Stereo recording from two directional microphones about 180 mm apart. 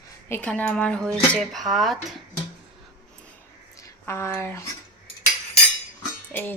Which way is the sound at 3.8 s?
15° left (ahead or behind).